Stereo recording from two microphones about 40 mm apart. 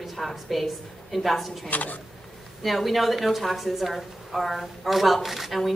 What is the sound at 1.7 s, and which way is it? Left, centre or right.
Speech, left.